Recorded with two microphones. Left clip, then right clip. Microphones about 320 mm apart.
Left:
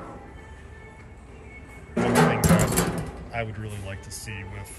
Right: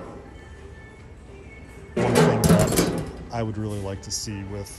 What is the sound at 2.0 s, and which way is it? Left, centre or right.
Music, centre.